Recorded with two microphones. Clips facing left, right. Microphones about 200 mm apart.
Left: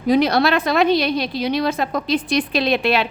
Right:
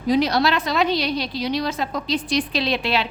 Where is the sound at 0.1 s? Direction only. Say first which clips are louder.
Left 3 dB; 55° left (ahead or behind).